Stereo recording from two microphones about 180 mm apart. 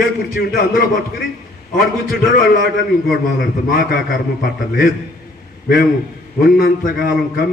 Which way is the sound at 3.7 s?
55° left (ahead or behind).